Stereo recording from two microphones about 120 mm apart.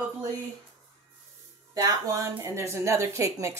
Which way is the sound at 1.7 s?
30° right (ahead or behind).